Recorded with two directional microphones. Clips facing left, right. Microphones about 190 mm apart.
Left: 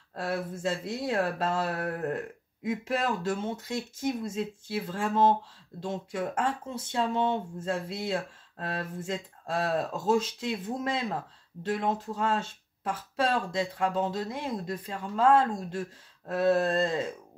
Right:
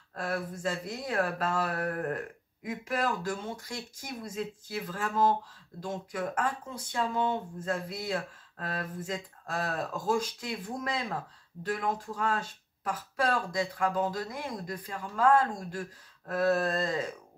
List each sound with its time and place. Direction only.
0.1 s speech: 25° left (ahead or behind)